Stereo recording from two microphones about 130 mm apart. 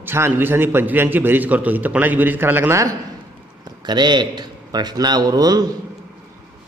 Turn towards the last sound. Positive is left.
turn(degrees=-30)  # may be behind; listen again after turning